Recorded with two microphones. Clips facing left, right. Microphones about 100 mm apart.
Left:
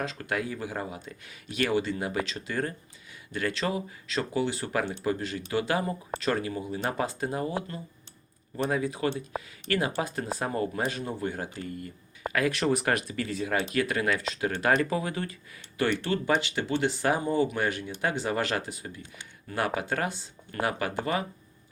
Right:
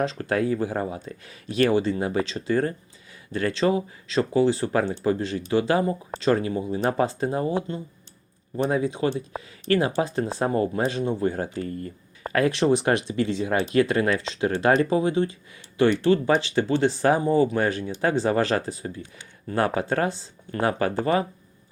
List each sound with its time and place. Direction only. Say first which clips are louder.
0.0 s speech: right 7 dB; 35° right (ahead or behind)